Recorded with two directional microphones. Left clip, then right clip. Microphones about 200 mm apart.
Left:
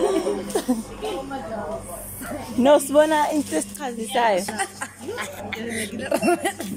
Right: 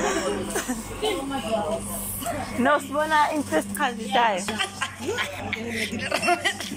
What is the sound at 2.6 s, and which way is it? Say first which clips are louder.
Speech: left 7 dB; 45° left (ahead or behind).